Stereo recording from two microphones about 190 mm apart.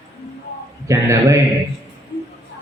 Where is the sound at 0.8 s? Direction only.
15° right (ahead or behind).